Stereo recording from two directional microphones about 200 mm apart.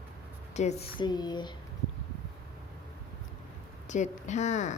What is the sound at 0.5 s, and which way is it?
Speech, 35° left (ahead or behind).